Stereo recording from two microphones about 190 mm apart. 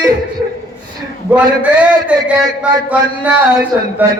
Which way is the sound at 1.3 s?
5° right (ahead or behind).